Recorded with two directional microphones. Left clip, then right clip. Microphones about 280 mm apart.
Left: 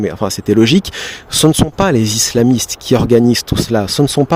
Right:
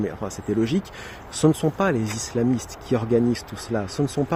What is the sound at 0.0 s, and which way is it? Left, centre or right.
Speech, left.